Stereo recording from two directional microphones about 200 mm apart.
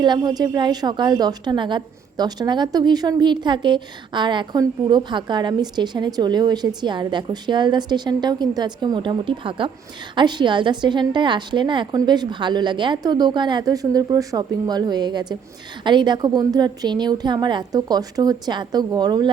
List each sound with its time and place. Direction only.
0.0 s a woman's voice: 20° right (ahead or behind)